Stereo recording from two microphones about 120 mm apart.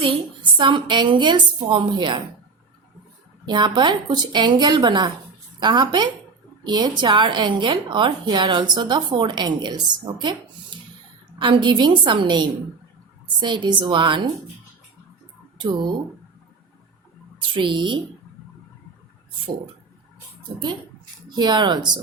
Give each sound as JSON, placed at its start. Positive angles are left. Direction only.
{"t": 0.0, "sound": "a woman's voice", "side_deg": -45}
{"t": 3.4, "sound": "a woman's voice", "side_deg": -40}
{"t": 11.3, "sound": "a woman's voice", "side_deg": -40}
{"t": 15.5, "sound": "speech", "side_deg": -40}
{"t": 17.5, "sound": "a woman's voice", "side_deg": -40}
{"t": 21.2, "sound": "a woman's voice", "side_deg": -35}